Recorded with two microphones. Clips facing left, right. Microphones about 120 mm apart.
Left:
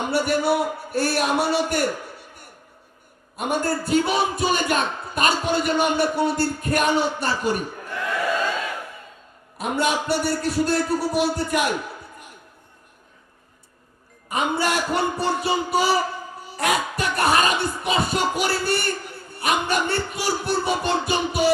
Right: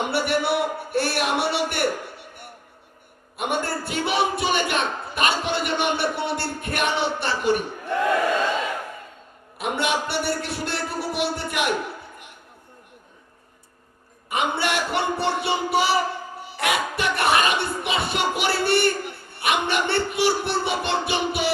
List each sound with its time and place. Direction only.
0.1 s a man's voice: 40° left (ahead or behind)
3.3 s a man's voice: 40° left (ahead or behind)
9.6 s a man's voice: 40° left (ahead or behind)
14.3 s a man's voice: 40° left (ahead or behind)